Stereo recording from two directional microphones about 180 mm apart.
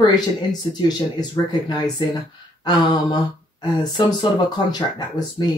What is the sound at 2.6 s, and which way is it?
Speech, 25° left (ahead or behind).